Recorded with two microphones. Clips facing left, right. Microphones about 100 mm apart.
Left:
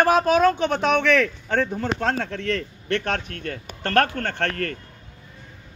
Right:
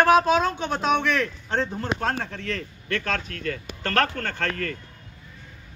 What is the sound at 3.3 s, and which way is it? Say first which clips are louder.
Speech: right 1 dB; 30° left (ahead or behind).